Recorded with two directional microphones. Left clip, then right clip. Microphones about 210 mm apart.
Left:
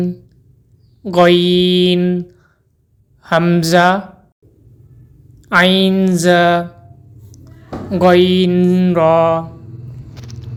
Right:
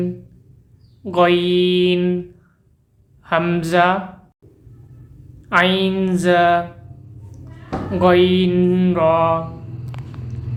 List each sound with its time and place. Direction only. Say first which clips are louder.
1.0 s speech: left 4 dB; 30° left (ahead or behind)
3.2 s speech: left 5 dB; 30° left (ahead or behind)
5.5 s music: left 4 dB; 30° left (ahead or behind)
7.9 s music: left 3 dB; 25° left (ahead or behind)